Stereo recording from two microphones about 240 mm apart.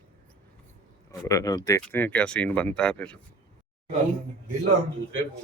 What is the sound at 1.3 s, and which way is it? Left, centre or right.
Speech, centre.